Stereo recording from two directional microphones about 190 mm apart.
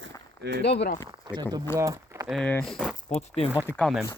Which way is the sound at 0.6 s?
65° left (ahead or behind).